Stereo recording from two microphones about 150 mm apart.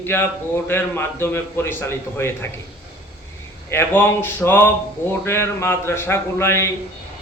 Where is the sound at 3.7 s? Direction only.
15° left (ahead or behind).